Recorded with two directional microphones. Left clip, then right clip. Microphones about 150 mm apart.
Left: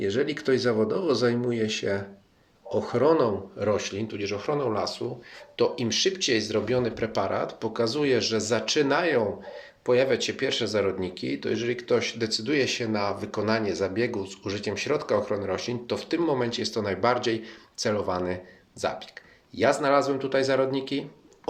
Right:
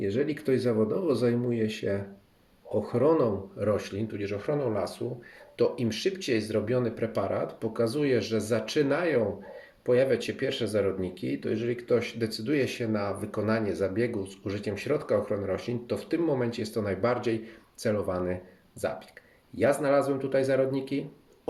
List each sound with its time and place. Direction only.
0.0 s speech: 20° right (ahead or behind)